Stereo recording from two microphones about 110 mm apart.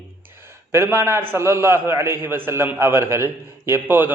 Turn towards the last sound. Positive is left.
turn(degrees=-20)  # may be behind; listen again after turning